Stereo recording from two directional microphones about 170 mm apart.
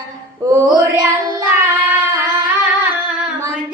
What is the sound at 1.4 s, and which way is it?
Singing, 15° right (ahead or behind).